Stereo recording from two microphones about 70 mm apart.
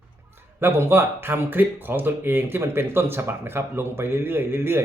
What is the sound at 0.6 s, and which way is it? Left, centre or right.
Speech, right.